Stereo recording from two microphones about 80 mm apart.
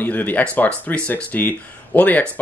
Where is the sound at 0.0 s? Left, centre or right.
Left.